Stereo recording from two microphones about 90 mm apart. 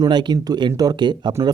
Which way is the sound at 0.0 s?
55° right (ahead or behind).